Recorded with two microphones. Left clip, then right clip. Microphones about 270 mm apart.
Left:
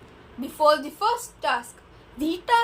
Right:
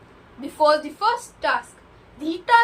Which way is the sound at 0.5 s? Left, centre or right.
Left.